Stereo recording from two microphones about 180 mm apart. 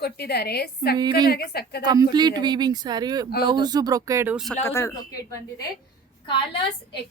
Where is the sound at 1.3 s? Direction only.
60° left (ahead or behind).